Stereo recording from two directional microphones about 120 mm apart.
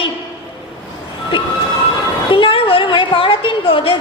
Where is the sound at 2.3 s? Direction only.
45° left (ahead or behind).